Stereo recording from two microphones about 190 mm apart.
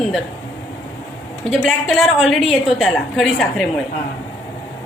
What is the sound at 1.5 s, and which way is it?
A woman's voice, centre (ahead or behind).